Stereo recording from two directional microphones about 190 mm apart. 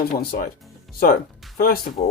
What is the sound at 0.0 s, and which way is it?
Speech, 55° left (ahead or behind).